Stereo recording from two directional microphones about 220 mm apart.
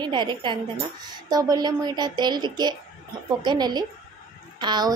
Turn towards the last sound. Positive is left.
turn(degrees=-20)  # may be behind; listen again after turning